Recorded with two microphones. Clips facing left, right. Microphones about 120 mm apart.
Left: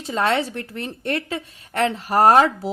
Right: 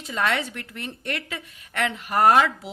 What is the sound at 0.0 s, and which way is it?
A woman's voice, 35° left (ahead or behind).